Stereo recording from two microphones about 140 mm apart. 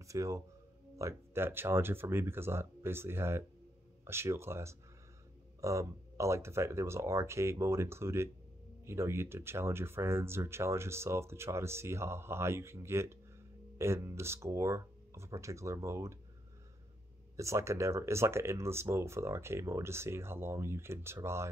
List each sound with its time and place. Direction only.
0.0 s speech: 20° right (ahead or behind)
17.4 s speech: 20° right (ahead or behind)